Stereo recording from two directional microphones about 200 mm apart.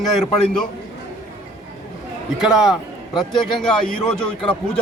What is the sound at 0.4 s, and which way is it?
Speech, 5° left (ahead or behind).